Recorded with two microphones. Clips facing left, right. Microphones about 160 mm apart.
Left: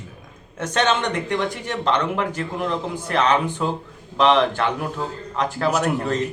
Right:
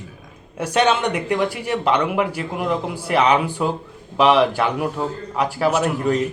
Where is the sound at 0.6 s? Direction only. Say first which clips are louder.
Right 3 dB; 10° right (ahead or behind).